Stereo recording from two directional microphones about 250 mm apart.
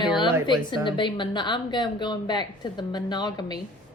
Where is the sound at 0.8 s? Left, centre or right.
Centre.